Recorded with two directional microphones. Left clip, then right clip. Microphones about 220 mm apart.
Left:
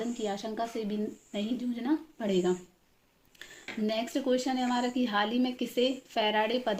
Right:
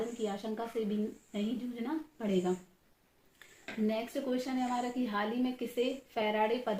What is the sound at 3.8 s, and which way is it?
A woman's voice, 50° left (ahead or behind).